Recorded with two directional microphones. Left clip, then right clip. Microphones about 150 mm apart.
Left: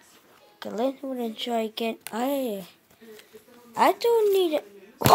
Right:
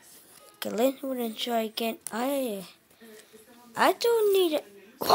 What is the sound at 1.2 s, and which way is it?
Speech, 5° right (ahead or behind).